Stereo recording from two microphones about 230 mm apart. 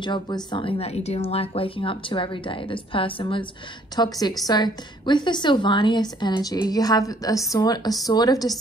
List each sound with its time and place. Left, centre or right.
0.0 s a woman's voice: centre